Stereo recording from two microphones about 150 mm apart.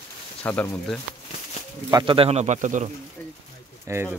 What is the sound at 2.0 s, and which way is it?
Speech, 40° right (ahead or behind).